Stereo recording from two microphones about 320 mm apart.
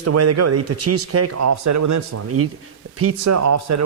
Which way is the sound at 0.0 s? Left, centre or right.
Right.